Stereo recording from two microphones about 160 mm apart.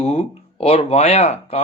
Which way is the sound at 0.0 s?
35° left (ahead or behind).